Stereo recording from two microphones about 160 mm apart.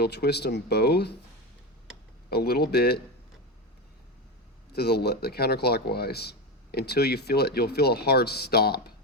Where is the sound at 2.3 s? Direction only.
80° left.